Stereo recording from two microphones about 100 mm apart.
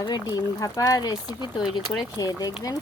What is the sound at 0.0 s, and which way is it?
Speech, 40° left (ahead or behind).